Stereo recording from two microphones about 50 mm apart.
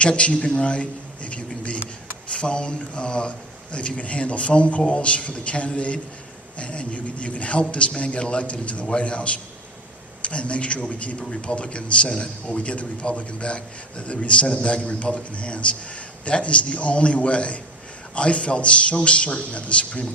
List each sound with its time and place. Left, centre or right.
0.0 s a man's voice: left